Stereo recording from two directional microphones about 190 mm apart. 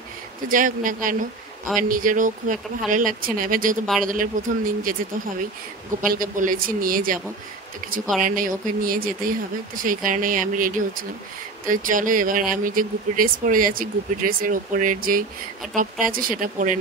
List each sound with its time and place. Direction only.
0.5 s speech: 45° right (ahead or behind)
6.0 s speech: 50° right (ahead or behind)
8.2 s speech: 45° right (ahead or behind)